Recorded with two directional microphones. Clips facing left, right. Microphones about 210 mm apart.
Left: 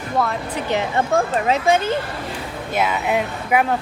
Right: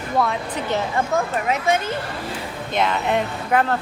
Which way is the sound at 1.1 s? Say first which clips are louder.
Left 5 dB; 30° left (ahead or behind).